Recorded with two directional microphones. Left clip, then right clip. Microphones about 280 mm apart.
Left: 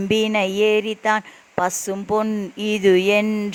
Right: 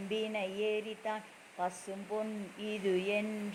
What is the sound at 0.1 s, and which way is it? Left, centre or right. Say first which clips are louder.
Mantra: left 16 dB; left.